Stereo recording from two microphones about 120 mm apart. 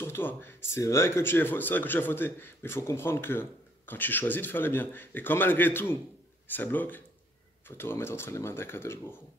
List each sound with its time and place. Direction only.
0.0 s speech: 15° left (ahead or behind)